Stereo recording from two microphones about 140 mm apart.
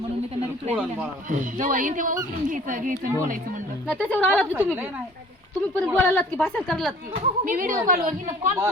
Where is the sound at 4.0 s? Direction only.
10° left (ahead or behind).